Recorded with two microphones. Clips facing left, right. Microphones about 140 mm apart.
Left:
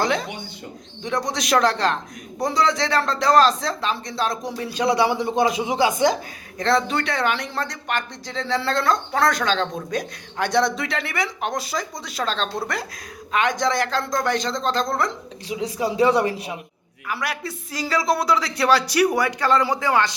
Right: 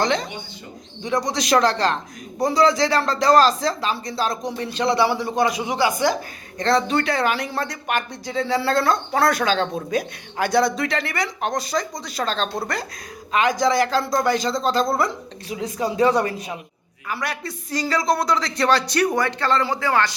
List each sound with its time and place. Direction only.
0.0 s speech: 5° left (ahead or behind); by 6.1 s 20° left (ahead or behind)
6.6 s speech: centre (ahead or behind)
15.4 s a man's voice: 15° left (ahead or behind)
17.1 s a man's voice: 5° left (ahead or behind)